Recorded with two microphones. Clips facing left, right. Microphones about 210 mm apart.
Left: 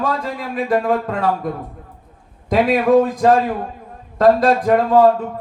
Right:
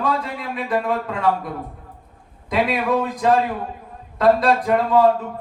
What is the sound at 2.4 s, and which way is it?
Speech, 45° left (ahead or behind).